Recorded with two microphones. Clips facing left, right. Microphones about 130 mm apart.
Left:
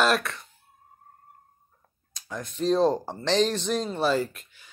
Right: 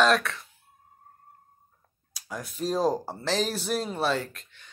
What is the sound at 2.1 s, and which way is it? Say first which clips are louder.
Speech: left 1 dB; 5° right (ahead or behind).